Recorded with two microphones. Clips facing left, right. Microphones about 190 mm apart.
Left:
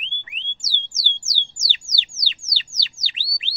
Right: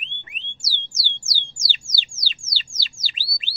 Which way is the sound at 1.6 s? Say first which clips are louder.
Right 1 dB; 45° left (ahead or behind).